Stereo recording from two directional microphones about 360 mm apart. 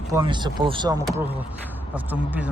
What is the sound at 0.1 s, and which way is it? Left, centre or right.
Speech, centre.